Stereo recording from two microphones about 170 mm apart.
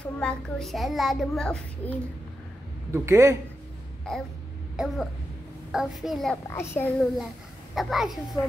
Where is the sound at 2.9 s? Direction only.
15° right (ahead or behind).